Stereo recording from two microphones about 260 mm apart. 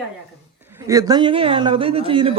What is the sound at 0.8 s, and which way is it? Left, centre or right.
A man's voice, centre.